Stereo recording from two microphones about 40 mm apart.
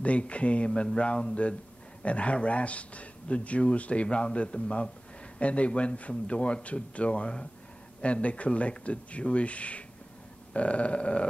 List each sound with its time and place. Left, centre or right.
0.0 s a man's voice: left